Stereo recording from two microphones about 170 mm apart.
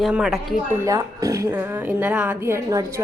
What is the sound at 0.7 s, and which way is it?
A woman's voice, 15° right (ahead or behind).